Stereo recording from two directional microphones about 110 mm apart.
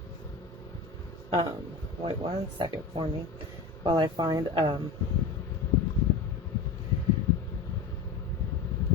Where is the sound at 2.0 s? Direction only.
45° right (ahead or behind).